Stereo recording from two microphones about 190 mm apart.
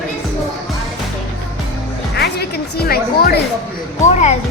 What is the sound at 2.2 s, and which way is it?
A woman's voice, 55° left (ahead or behind).